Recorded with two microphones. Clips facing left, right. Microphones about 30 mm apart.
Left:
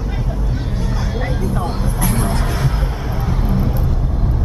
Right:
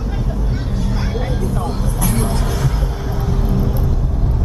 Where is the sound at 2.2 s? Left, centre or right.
Left.